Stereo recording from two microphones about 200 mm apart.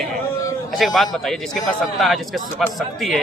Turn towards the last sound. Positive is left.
turn(degrees=0)  # may be behind; listen again after turning